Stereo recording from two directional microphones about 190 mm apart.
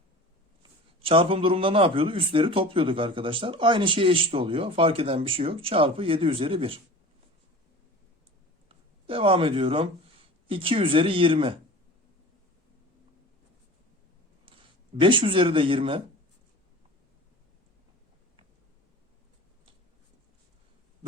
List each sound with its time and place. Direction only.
1.0 s a man's voice: 30° right (ahead or behind)
9.0 s a man's voice: 30° right (ahead or behind)
15.0 s a man's voice: 25° right (ahead or behind)